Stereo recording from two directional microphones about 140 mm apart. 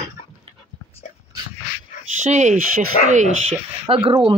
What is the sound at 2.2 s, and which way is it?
Speech, 55° right (ahead or behind).